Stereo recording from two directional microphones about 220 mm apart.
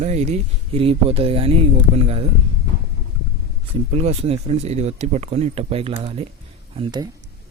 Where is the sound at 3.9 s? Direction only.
30° right (ahead or behind).